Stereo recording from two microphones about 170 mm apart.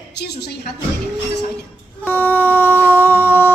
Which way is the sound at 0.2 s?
75° left (ahead or behind).